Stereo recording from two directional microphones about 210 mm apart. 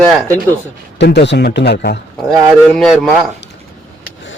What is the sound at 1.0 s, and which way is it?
Speech, 55° left (ahead or behind).